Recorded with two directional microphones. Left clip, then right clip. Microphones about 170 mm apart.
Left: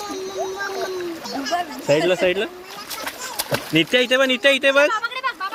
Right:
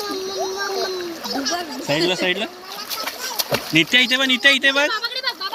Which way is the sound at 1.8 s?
55° left (ahead or behind).